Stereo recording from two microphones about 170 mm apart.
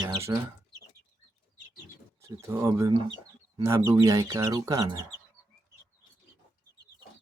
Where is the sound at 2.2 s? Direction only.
15° right (ahead or behind).